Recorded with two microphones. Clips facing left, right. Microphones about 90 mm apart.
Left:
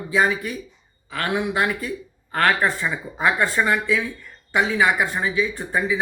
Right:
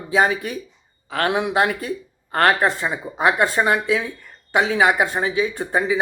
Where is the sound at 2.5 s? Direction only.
20° right (ahead or behind).